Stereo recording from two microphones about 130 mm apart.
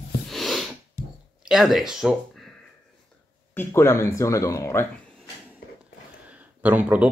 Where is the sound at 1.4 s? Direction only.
Centre (ahead or behind).